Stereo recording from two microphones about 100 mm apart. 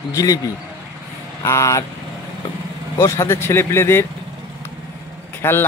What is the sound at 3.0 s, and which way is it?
Speech, 30° left (ahead or behind).